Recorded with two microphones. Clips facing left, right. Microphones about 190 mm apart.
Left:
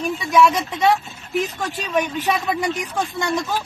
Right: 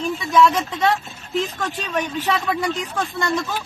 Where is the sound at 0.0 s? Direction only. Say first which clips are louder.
Even; 10° left (ahead or behind).